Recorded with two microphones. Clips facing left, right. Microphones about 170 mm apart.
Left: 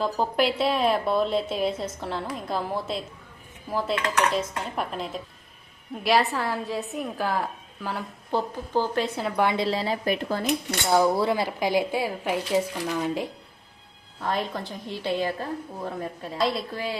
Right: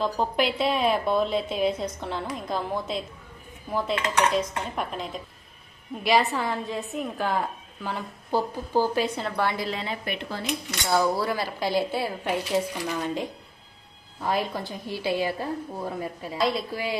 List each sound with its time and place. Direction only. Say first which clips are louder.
0.0 s a woman's voice: left 1 dB; centre (ahead or behind)
9.3 s speech: left 3 dB; 15° left (ahead or behind)
9.6 s speech: left 6 dB; 35° left (ahead or behind)
10.8 s a woman's voice: left 3 dB; 20° left (ahead or behind); by 16.6 s centre (ahead or behind)
16.7 s a woman's voice: right 1 dB; 15° right (ahead or behind)